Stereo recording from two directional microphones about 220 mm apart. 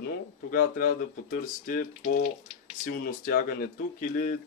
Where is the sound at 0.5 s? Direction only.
40° left (ahead or behind).